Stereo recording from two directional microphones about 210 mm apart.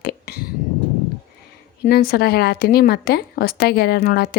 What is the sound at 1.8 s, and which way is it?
A woman's voice, 45° left (ahead or behind).